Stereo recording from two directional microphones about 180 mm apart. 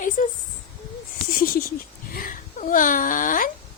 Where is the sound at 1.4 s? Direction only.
55° left (ahead or behind).